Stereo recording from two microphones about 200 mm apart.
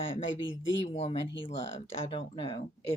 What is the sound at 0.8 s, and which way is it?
Speech, 30° left (ahead or behind).